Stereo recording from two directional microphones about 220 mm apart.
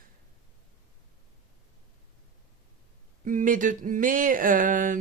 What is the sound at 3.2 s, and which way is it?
Speech, 35° right (ahead or behind).